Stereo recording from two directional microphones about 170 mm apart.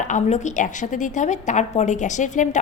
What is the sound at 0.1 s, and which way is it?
A woman's voice, 45° left (ahead or behind).